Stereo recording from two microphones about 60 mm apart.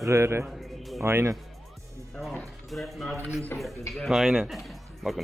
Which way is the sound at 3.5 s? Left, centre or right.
Left.